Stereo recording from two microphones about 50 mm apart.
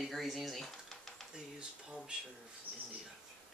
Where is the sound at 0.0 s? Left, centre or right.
Centre.